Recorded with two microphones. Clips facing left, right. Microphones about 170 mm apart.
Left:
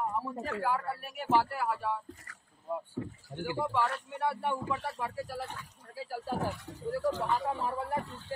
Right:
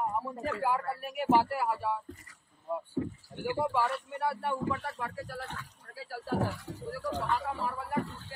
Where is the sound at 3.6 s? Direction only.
5° right (ahead or behind).